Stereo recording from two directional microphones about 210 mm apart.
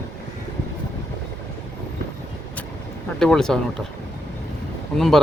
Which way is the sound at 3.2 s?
Centre (ahead or behind).